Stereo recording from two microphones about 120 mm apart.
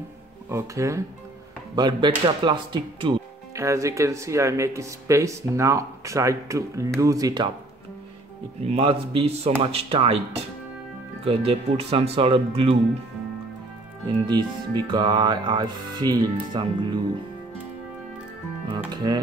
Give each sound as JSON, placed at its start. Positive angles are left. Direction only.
{"t": 0.5, "sound": "speech", "side_deg": -25}
{"t": 1.8, "sound": "music", "side_deg": -40}
{"t": 3.5, "sound": "speech", "side_deg": -25}
{"t": 8.6, "sound": "speech", "side_deg": -55}
{"t": 11.2, "sound": "speech", "side_deg": -55}
{"t": 14.0, "sound": "music", "side_deg": -40}
{"t": 18.9, "sound": "music", "side_deg": -35}